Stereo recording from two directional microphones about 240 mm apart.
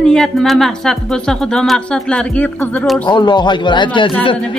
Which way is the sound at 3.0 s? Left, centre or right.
Centre.